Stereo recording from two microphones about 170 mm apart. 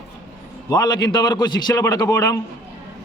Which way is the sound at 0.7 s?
25° left (ahead or behind).